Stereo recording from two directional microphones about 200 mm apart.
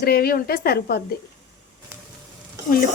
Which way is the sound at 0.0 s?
50° left (ahead or behind).